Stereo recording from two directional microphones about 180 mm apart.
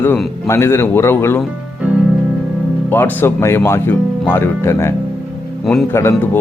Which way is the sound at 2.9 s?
10° left (ahead or behind).